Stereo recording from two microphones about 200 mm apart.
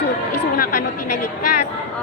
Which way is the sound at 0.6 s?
45° left (ahead or behind).